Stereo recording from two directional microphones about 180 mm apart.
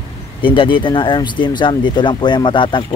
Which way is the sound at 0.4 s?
30° left (ahead or behind).